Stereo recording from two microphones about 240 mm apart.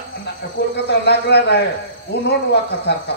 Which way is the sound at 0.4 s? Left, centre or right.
Left.